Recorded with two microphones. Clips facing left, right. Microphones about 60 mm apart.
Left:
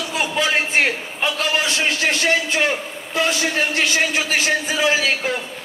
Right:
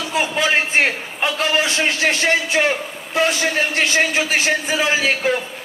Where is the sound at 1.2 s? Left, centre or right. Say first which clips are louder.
Right 2 dB; right.